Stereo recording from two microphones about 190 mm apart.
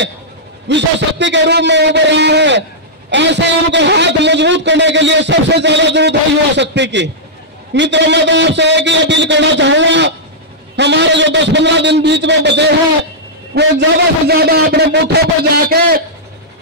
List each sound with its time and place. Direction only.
0.7 s a man's voice: 65° right (ahead or behind)